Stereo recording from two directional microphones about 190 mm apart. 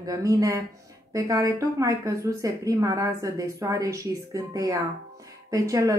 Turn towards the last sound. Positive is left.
turn(degrees=-15)  # may be behind; listen again after turning